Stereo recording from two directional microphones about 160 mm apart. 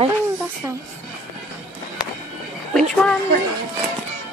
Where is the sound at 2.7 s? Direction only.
5° left (ahead or behind).